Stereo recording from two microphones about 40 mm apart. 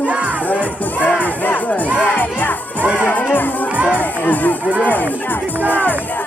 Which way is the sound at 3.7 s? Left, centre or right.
Right.